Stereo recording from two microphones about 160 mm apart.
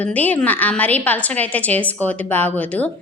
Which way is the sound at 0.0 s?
10° left (ahead or behind).